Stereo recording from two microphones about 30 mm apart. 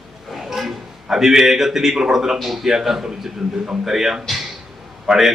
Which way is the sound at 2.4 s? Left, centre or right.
Centre.